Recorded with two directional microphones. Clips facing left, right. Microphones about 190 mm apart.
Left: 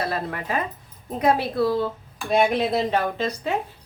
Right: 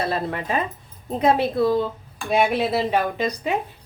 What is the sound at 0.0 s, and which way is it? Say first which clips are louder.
Speech: right 2 dB; 25° right (ahead or behind).